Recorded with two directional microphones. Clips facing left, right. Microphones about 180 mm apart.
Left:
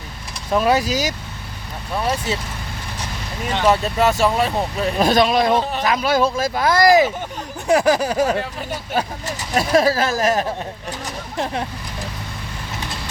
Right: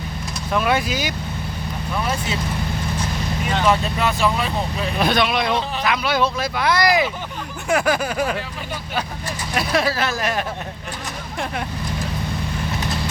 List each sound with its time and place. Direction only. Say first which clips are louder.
0.5 s speech: left 3 dB; 35° left (ahead or behind)
3.7 s speech: left 4 dB; 40° left (ahead or behind)
9.6 s speech: left 5 dB; 40° left (ahead or behind)